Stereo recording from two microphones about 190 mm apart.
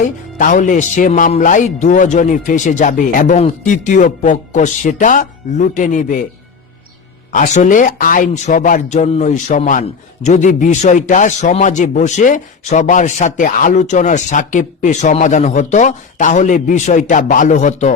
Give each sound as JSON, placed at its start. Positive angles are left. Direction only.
{"t": 0.3, "sound": "a man's voice", "side_deg": 40}
{"t": 7.3, "sound": "a man's voice", "side_deg": 40}